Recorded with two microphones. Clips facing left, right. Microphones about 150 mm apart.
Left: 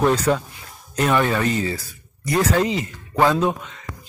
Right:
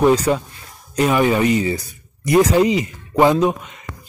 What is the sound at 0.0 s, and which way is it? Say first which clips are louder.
Speech: right 3 dB; 10° right (ahead or behind).